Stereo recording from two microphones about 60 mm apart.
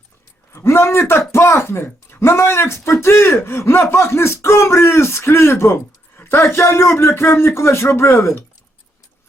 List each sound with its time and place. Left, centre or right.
0.5 s a man's voice: left